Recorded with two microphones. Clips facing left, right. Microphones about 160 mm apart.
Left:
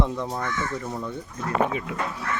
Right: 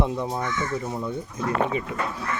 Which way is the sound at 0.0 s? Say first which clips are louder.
Right 1 dB; 10° right (ahead or behind).